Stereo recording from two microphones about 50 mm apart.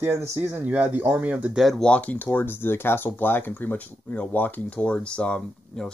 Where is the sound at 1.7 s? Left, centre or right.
Centre.